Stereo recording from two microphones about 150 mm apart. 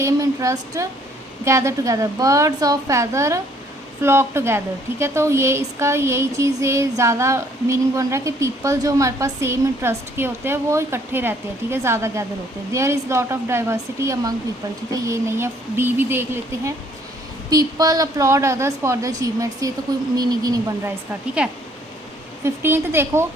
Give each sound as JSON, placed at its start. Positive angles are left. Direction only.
{"t": 0.0, "sound": "a woman's voice", "side_deg": -20}
{"t": 21.4, "sound": "a woman's voice", "side_deg": -5}